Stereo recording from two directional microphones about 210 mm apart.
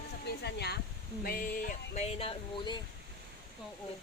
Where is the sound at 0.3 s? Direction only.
50° left (ahead or behind).